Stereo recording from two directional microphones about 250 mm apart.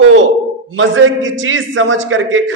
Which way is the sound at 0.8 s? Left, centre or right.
Right.